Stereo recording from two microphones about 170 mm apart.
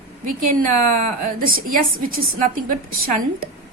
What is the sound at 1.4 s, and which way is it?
Speech, 60° right (ahead or behind).